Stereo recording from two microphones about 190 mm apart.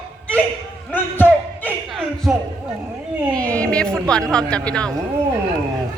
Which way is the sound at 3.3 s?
5° left (ahead or behind).